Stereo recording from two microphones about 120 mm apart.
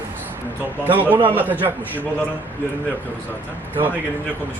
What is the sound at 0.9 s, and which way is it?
Speech, 15° right (ahead or behind).